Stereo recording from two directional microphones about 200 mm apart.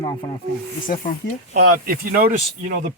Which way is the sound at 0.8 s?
45° left (ahead or behind).